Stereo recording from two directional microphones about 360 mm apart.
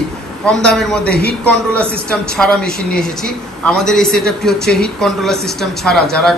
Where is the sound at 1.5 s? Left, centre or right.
Centre.